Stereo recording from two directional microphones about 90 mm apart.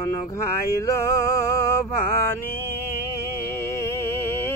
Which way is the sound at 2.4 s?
25° left (ahead or behind).